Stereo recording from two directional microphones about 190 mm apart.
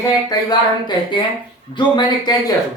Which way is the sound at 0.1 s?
20° left (ahead or behind).